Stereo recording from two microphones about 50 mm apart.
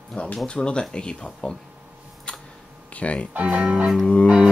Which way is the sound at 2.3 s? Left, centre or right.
Left.